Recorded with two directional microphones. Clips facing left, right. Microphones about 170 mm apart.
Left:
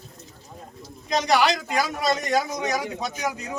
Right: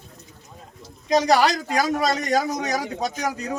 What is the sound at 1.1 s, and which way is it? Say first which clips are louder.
A man's voice: right 3 dB; 40° right (ahead or behind).